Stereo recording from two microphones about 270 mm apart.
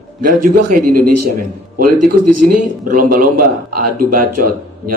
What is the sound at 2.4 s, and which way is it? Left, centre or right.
A man's voice, right.